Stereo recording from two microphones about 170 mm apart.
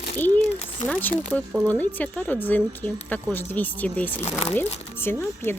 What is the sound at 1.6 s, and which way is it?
Speech, 10° left (ahead or behind).